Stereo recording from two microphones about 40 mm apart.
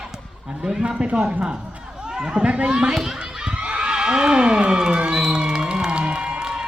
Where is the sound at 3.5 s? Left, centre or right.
Right.